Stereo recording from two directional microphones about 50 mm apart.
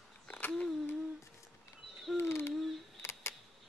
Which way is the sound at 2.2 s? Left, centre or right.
Left.